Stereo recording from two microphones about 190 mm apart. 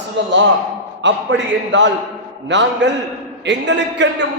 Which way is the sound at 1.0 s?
75° right (ahead or behind).